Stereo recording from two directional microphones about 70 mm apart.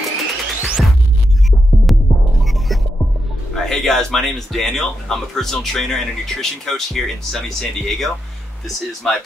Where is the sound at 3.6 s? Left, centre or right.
Centre.